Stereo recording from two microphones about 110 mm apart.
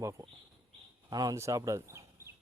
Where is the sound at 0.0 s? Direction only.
30° right (ahead or behind).